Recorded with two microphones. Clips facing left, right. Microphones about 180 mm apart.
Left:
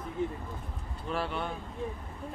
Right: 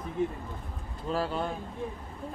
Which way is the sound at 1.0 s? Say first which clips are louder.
Right 3 dB; 35° right (ahead or behind).